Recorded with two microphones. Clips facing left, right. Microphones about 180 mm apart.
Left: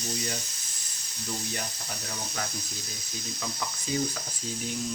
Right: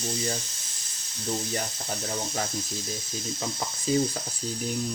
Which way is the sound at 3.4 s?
25° right (ahead or behind).